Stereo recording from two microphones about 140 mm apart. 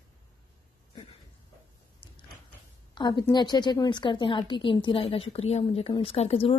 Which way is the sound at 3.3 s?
30° left (ahead or behind).